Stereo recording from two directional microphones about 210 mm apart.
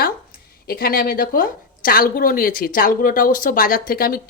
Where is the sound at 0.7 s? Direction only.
45° left (ahead or behind).